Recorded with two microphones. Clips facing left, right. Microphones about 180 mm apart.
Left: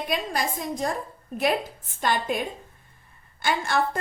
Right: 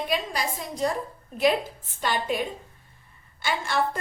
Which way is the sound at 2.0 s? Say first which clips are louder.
Left 1 dB; 50° left (ahead or behind).